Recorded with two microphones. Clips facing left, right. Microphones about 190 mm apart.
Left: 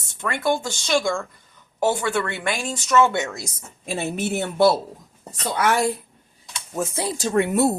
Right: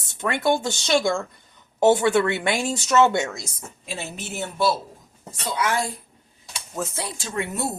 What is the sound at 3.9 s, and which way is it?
Speech, 55° left (ahead or behind).